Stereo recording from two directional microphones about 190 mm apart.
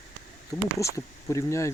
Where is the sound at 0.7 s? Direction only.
15° left (ahead or behind).